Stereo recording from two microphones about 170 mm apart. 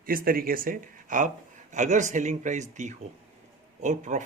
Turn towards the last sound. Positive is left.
turn(degrees=-45)  # may be behind; listen again after turning